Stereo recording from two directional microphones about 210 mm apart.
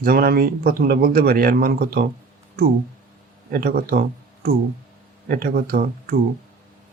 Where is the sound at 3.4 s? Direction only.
45° right (ahead or behind).